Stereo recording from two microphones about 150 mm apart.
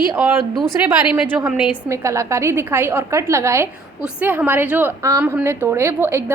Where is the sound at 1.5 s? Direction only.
5° right (ahead or behind).